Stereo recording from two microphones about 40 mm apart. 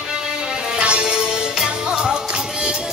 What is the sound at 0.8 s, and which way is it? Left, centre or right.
Music, right.